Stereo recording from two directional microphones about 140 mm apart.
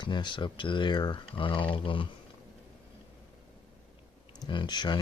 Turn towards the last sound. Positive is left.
turn(degrees=30)  # may be behind; listen again after turning